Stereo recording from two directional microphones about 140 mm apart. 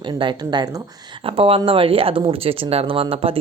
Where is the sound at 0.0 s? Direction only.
35° right (ahead or behind).